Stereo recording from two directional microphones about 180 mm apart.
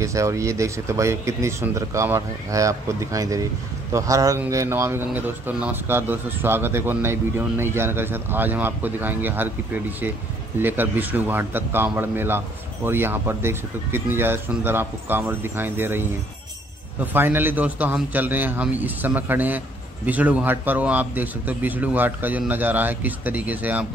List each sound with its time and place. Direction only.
0.0 s a man's voice: 15° right (ahead or behind)